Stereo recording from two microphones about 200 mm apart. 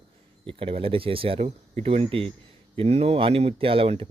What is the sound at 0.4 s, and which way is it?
Speech, 25° right (ahead or behind).